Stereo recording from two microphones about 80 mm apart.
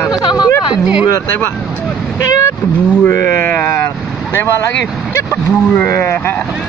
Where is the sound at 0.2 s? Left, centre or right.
Left.